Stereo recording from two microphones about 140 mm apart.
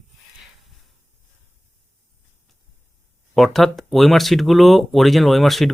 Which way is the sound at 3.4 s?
Centre (ahead or behind).